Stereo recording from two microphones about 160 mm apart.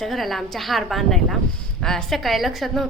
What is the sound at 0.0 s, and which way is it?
A woman's voice, centre (ahead or behind).